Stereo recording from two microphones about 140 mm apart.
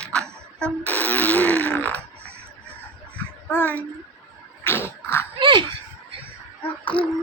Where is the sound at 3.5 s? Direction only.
10° left (ahead or behind).